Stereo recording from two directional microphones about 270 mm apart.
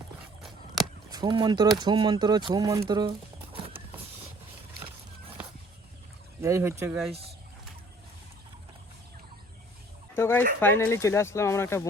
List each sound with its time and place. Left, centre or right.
1.1 s speech: centre
6.4 s speech: centre
10.2 s speech: centre